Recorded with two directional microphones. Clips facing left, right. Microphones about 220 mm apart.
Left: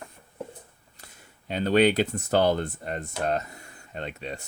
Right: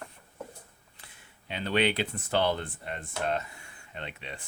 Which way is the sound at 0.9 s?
40° left (ahead or behind).